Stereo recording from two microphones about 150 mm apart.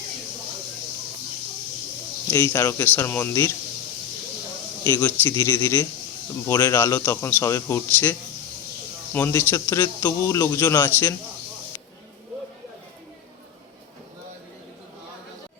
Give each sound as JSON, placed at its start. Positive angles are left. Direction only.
{"t": 2.3, "sound": "a man's voice", "side_deg": 15}
{"t": 4.8, "sound": "a man's voice", "side_deg": 15}
{"t": 9.1, "sound": "a man's voice", "side_deg": 15}